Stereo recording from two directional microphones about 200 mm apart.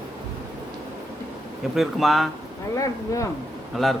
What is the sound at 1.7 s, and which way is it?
Speech, centre (ahead or behind).